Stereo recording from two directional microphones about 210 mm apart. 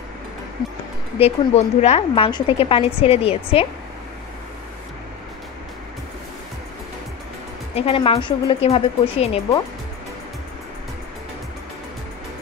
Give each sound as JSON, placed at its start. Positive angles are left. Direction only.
{"t": 1.2, "sound": "a woman's voice", "side_deg": 30}
{"t": 7.7, "sound": "a woman's voice", "side_deg": 25}